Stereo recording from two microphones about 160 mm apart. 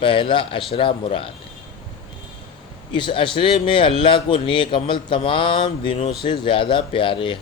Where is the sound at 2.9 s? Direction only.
30° left (ahead or behind).